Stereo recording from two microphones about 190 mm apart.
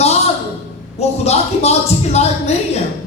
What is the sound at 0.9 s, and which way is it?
Speech, 35° left (ahead or behind).